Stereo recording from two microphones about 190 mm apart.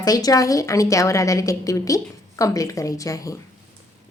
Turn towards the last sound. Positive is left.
turn(degrees=15)  # may be behind; listen again after turning